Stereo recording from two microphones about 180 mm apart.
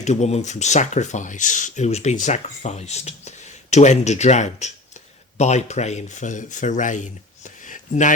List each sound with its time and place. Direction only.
0.0 s speech: 40° left (ahead or behind)